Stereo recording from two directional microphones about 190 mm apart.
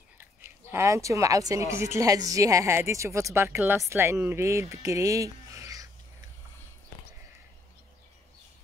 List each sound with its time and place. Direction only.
0.2 s speech: 10° right (ahead or behind)